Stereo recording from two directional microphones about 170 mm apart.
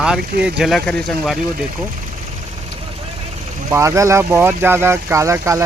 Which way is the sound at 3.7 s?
15° right (ahead or behind).